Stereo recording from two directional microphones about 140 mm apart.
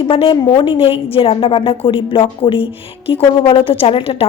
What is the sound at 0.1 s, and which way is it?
A woman's voice, 40° left (ahead or behind).